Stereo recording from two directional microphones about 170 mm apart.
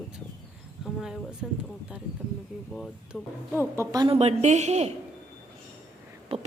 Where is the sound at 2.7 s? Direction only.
Centre (ahead or behind).